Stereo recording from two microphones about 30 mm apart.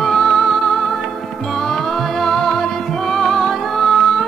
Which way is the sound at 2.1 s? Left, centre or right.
Centre.